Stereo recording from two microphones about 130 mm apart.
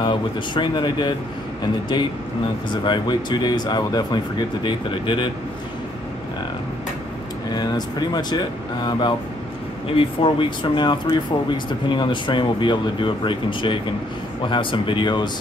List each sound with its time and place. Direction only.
0.0 s speech: 35° left (ahead or behind)
2.7 s speech: 35° left (ahead or behind)
7.5 s speech: 30° left (ahead or behind)